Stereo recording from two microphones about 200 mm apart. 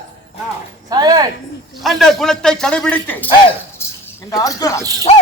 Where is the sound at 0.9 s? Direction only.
20° right (ahead or behind).